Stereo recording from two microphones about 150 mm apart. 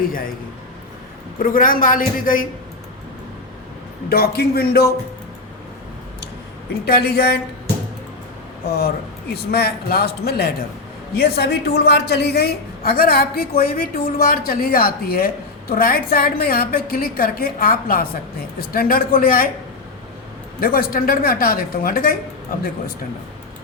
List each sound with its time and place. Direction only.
0.0 s a man's voice: 70° left (ahead or behind)
1.4 s a man's voice: 70° left (ahead or behind)
4.1 s a woman's voice: 90° left
6.8 s a woman's voice: 90° left
9.3 s a woman's voice: 90° left
20.6 s a woman's voice: 80° left